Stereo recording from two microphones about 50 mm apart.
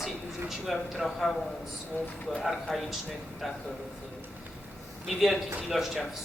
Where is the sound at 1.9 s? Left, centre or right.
Left.